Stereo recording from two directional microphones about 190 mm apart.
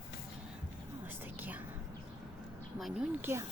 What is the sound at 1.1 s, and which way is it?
Whispering, 10° right (ahead or behind).